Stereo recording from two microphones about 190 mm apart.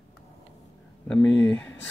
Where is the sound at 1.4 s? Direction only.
5° left (ahead or behind).